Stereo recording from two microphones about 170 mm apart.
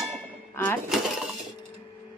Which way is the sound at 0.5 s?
15° left (ahead or behind).